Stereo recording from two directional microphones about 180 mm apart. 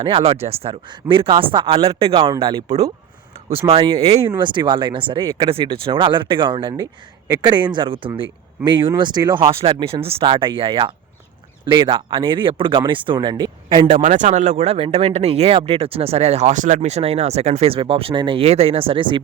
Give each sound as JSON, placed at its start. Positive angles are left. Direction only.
{"t": 0.0, "sound": "speech", "side_deg": -30}
{"t": 13.9, "sound": "speech", "side_deg": -40}